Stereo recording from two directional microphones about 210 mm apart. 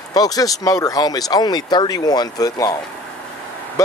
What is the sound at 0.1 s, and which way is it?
Speech, 20° left (ahead or behind).